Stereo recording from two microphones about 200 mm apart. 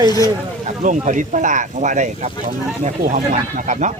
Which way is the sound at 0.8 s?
40° right (ahead or behind).